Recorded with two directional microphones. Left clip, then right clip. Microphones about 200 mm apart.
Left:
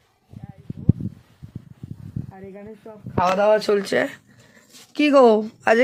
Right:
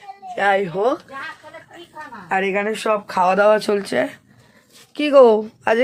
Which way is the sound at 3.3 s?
50° right (ahead or behind).